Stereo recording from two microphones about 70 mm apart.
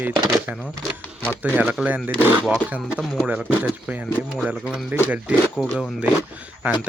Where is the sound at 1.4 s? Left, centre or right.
Right.